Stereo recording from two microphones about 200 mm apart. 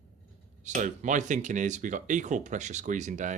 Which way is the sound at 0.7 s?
35° right (ahead or behind).